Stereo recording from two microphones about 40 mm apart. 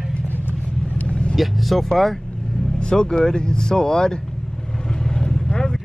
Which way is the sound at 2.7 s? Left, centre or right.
Left.